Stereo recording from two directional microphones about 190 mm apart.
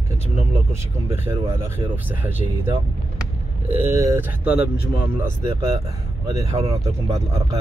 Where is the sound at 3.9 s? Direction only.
15° right (ahead or behind).